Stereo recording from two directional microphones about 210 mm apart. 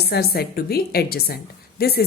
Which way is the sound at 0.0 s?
50° left (ahead or behind).